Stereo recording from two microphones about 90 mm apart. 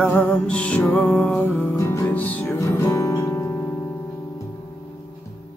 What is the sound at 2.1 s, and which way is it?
Music, 20° left (ahead or behind).